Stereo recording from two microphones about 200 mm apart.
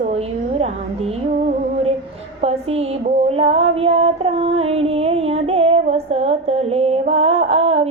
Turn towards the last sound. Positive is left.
turn(degrees=-30)  # may be behind; listen again after turning